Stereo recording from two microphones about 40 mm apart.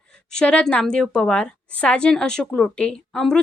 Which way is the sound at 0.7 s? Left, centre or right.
Left.